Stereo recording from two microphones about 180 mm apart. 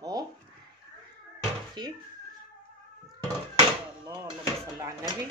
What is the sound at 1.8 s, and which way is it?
Speech, 25° right (ahead or behind).